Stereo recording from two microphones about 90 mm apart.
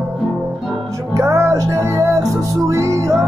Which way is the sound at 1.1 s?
30° right (ahead or behind).